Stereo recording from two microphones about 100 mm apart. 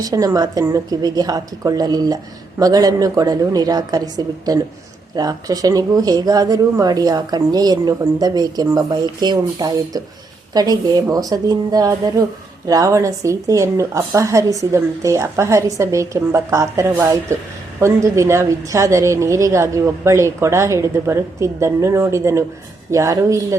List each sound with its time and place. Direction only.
0.0 s a woman's voice: 35° right (ahead or behind)